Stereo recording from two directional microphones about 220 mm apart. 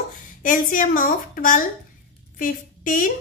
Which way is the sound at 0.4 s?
40° left (ahead or behind).